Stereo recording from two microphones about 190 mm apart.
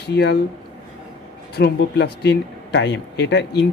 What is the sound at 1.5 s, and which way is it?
Speech, 60° left (ahead or behind).